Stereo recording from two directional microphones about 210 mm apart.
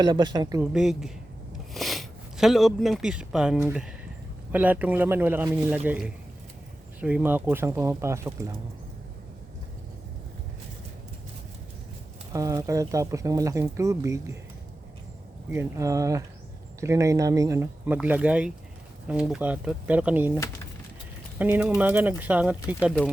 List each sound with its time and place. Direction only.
0.0 s speech: 20° right (ahead or behind)
0.6 s a woman's voice: 5° right (ahead or behind)
12.3 s speech: 15° right (ahead or behind)
15.5 s speech: 15° right (ahead or behind)